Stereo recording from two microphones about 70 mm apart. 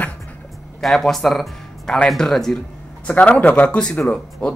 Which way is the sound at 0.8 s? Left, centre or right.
Centre.